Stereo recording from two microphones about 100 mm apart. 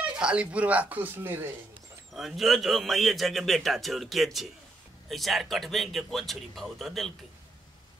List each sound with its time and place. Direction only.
0.2 s speech: 10° right (ahead or behind)
2.1 s a man's voice: centre (ahead or behind)